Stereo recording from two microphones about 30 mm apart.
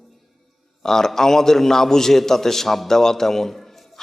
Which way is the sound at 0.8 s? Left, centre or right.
Centre.